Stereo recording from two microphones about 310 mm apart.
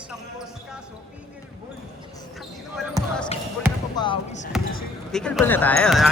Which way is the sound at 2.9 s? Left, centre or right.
Centre.